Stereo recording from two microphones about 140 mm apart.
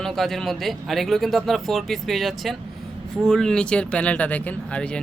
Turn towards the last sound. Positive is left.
turn(degrees=10)  # may be behind; listen again after turning